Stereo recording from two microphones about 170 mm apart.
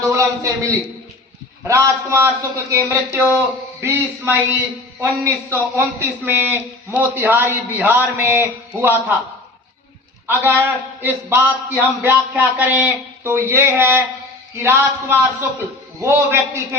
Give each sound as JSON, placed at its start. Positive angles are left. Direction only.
{"t": 0.1, "sound": "a man's voice", "side_deg": -15}
{"t": 10.6, "sound": "a man's voice", "side_deg": -10}